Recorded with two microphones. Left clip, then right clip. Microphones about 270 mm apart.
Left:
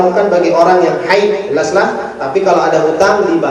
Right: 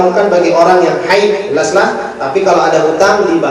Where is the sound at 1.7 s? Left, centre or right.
Centre.